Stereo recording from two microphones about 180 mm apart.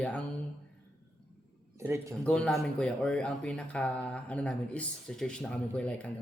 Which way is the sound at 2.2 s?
5° left (ahead or behind).